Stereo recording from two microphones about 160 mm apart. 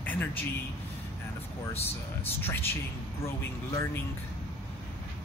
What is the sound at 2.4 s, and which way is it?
Speech, 15° left (ahead or behind).